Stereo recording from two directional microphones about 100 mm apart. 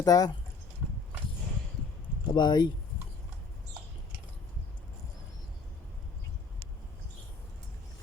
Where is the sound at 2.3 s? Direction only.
45° left (ahead or behind).